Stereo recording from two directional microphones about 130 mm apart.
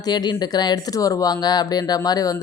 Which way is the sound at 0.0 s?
30° left (ahead or behind).